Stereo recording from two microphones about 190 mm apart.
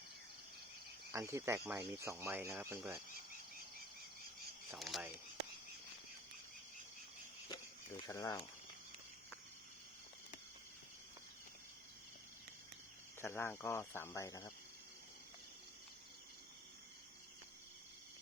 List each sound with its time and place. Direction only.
1.1 s speech: 15° right (ahead or behind)
4.8 s a sound: centre (ahead or behind)
8.0 s speech: 15° left (ahead or behind)
13.2 s speech: 10° left (ahead or behind)